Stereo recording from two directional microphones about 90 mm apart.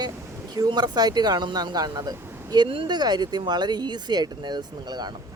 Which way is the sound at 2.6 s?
80° right.